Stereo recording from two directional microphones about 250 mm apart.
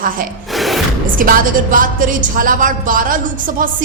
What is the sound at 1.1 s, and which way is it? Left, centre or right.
A woman's voice, right.